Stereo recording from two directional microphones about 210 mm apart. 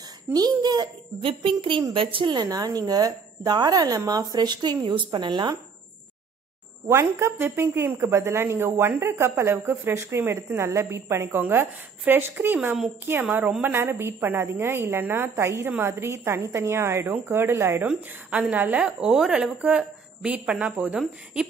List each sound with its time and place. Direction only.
0.3 s a child's voice: 20° right (ahead or behind)
6.9 s a woman's voice: 10° right (ahead or behind)